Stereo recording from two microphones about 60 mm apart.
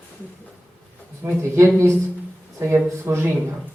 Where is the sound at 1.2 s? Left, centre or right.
Right.